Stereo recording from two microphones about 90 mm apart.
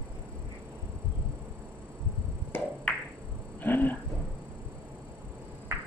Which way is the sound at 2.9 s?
15° left (ahead or behind).